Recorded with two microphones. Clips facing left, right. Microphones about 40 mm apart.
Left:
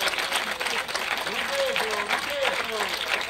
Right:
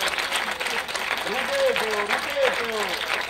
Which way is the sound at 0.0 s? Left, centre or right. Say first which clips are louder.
Right 1 dB; centre.